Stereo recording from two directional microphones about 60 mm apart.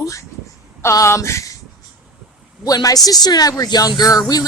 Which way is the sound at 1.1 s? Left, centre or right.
Left.